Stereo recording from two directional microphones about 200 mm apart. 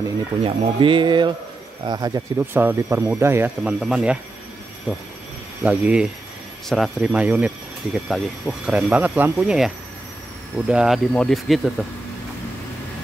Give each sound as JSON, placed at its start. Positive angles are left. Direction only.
{"t": 0.4, "sound": "speech", "side_deg": -25}
{"t": 5.6, "sound": "speech", "side_deg": -5}
{"t": 10.7, "sound": "speech", "side_deg": -5}